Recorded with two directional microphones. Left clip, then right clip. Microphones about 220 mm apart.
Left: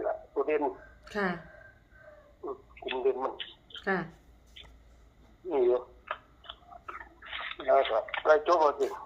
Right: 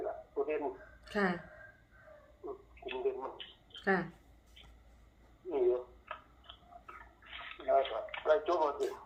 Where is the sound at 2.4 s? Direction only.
50° left (ahead or behind).